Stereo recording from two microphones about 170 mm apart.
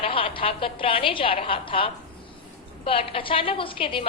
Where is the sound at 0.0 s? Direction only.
35° left (ahead or behind).